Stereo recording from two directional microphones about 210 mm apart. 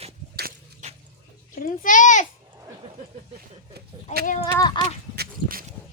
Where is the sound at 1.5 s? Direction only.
40° left (ahead or behind).